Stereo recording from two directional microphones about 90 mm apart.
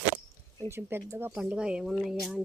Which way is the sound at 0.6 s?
30° right (ahead or behind).